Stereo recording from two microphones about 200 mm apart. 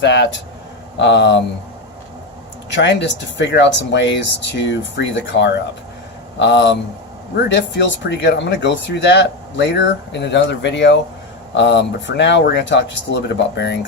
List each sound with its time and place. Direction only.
0.0 s speech: 60° left (ahead or behind)
2.6 s speech: 60° left (ahead or behind)